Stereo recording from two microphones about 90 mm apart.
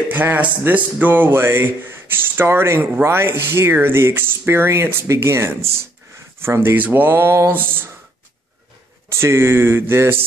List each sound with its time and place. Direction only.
0.1 s speech: 20° right (ahead or behind)
9.2 s speech: 25° right (ahead or behind)